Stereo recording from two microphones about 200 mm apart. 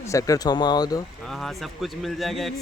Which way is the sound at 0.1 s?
15° left (ahead or behind).